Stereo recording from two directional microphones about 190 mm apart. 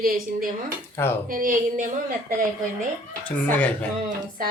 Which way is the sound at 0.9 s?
10° left (ahead or behind).